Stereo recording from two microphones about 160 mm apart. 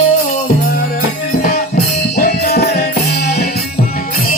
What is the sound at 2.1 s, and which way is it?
Music, 80° left.